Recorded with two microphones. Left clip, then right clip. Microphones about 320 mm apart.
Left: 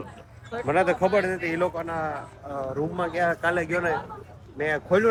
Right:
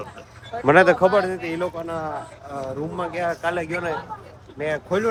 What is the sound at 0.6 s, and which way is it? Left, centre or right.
Speech, right.